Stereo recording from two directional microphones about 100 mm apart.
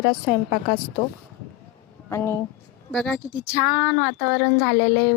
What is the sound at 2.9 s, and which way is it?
Speech, 5° left (ahead or behind).